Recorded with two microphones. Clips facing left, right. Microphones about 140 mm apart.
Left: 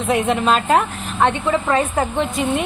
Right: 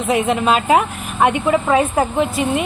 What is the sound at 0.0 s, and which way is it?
A woman's voice, centre (ahead or behind).